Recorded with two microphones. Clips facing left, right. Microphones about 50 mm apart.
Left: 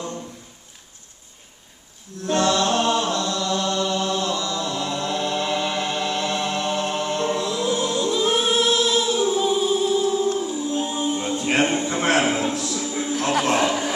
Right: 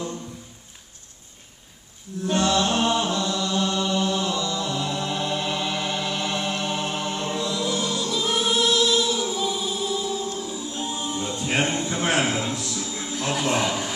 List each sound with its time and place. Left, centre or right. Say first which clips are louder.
2.2 s chant: left 2 dB; centre
5.8 s music: left 3 dB; centre
6.3 s chant: left 3 dB; centre
7.3 s music: left 2 dB; left
7.6 s choir: left 4 dB; centre
12.2 s a sound: left 3 dB; left
13.1 s dog: left 3 dB; left
13.7 s a sound: left 4 dB; left